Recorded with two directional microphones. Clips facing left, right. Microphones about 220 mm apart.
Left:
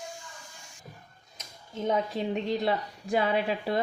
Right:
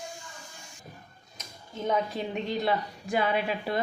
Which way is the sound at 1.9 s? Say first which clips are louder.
Left 1 dB; 30° left (ahead or behind).